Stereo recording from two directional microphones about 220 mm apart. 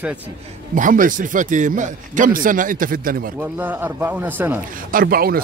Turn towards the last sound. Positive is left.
turn(degrees=-45)  # may be behind; listen again after turning